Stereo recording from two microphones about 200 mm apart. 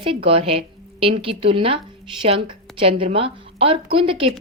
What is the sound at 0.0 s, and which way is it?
A woman's voice, 25° right (ahead or behind).